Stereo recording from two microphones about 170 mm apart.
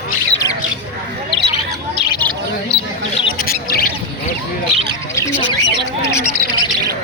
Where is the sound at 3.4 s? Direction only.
60° left (ahead or behind).